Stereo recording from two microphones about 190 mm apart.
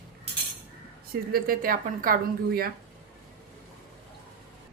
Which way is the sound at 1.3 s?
50° right (ahead or behind).